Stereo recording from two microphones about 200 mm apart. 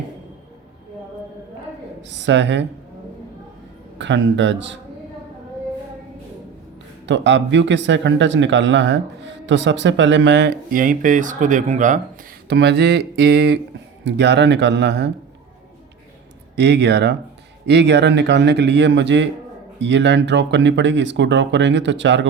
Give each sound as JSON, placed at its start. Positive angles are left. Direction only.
{"t": 2.0, "sound": "a sound", "side_deg": -65}
{"t": 3.9, "sound": "speech", "side_deg": -65}
{"t": 7.0, "sound": "speech", "side_deg": -65}
{"t": 12.5, "sound": "speech", "side_deg": -55}
{"t": 16.6, "sound": "speech", "side_deg": -60}